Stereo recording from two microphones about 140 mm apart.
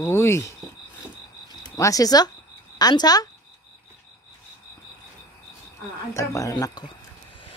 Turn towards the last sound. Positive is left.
turn(degrees=30)  # may be behind; listen again after turning